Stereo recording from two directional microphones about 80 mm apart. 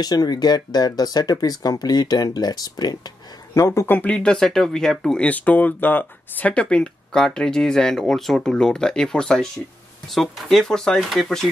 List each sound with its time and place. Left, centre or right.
0.0 s speech: left
3.5 s speech: left
3.9 s speech: centre
5.2 s speech: centre